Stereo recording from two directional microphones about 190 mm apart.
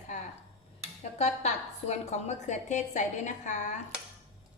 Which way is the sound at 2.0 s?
35° left (ahead or behind).